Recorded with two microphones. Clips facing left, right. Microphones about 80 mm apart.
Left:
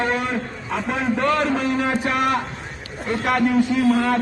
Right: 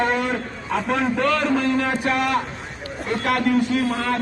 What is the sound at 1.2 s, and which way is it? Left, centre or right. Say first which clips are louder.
A man's voice: left 2 dB; left.